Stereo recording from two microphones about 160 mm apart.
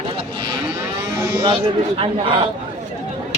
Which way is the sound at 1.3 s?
30° right (ahead or behind).